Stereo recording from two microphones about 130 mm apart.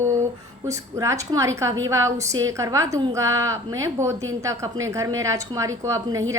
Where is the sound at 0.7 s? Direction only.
25° right (ahead or behind).